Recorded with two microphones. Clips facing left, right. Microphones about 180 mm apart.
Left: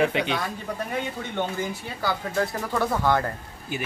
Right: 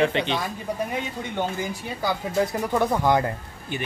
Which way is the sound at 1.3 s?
20° right (ahead or behind).